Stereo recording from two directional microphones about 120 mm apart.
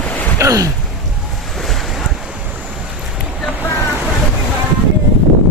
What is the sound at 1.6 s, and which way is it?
Boat, centre (ahead or behind).